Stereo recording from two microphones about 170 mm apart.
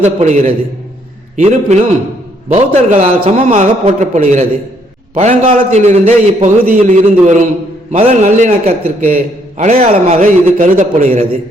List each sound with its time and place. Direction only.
0.0 s a man's voice: 40° right (ahead or behind)